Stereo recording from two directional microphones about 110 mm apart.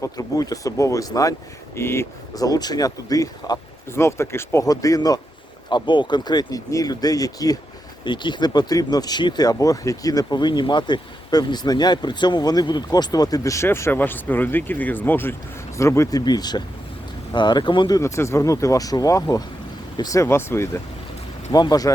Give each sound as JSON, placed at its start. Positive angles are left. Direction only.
{"t": 0.0, "sound": "speech", "side_deg": 30}
{"t": 3.8, "sound": "speech", "side_deg": 25}
{"t": 8.0, "sound": "speech", "side_deg": 45}
{"t": 16.2, "sound": "speech", "side_deg": 40}
{"t": 21.5, "sound": "speech", "side_deg": 35}